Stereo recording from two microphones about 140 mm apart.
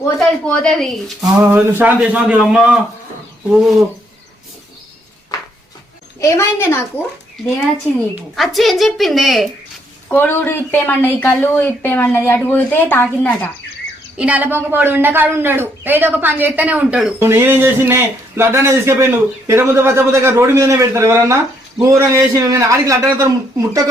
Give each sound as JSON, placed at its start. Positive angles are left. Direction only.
{"t": 0.2, "sound": "a woman's voice", "side_deg": 5}
{"t": 1.5, "sound": "a woman's voice", "side_deg": -10}
{"t": 6.1, "sound": "a woman's voice", "side_deg": 20}
{"t": 8.4, "sound": "a woman's voice", "side_deg": 0}
{"t": 10.1, "sound": "a woman's voice", "side_deg": 15}
{"t": 14.2, "sound": "a woman's voice", "side_deg": -10}